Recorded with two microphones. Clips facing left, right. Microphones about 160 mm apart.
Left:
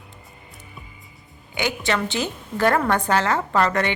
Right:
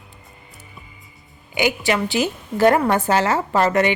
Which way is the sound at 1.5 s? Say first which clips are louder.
Right 4 dB; 15° right (ahead or behind).